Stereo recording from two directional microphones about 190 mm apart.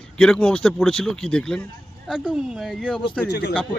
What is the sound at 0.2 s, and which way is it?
Speech, 5° left (ahead or behind).